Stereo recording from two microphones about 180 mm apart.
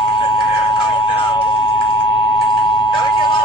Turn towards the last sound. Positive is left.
turn(degrees=25)  # may be behind; listen again after turning